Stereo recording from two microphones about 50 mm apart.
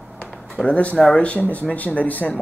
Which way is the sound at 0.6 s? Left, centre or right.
Centre.